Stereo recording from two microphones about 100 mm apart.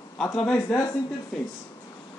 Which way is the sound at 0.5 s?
25° left (ahead or behind).